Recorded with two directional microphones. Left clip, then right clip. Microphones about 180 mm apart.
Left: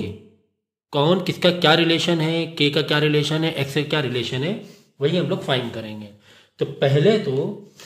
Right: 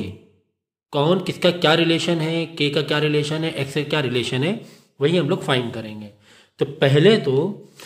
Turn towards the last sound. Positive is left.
turn(degrees=-50)  # may be behind; listen again after turning